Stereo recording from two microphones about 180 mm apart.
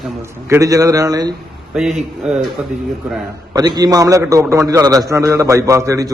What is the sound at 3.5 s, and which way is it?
A man's voice, 20° right (ahead or behind).